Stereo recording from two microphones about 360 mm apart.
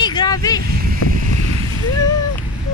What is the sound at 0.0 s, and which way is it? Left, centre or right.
Vehicle, centre.